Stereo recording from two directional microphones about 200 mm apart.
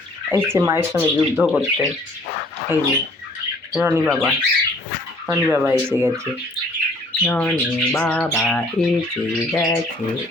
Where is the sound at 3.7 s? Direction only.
10° right (ahead or behind).